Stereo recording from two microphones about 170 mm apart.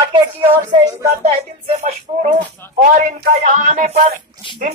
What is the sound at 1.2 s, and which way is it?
Speech, 40° right (ahead or behind).